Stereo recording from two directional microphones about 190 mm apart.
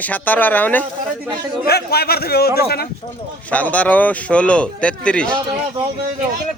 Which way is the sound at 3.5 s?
5° left (ahead or behind).